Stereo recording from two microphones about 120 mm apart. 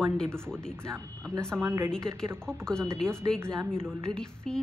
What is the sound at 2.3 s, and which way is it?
Speech, 20° right (ahead or behind).